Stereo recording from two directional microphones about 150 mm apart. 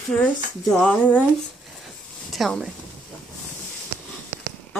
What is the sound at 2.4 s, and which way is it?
Speech, centre (ahead or behind).